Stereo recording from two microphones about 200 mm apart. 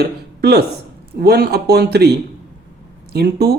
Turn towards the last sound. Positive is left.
turn(degrees=-50)  # may be behind; listen again after turning